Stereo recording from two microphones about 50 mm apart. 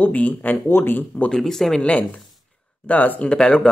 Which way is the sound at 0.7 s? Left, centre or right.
Left.